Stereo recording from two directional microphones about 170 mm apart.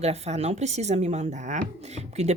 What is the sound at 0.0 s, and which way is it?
Speech, 40° right (ahead or behind).